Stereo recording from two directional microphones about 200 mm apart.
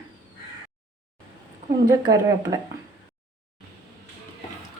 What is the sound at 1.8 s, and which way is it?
Speech, 20° right (ahead or behind).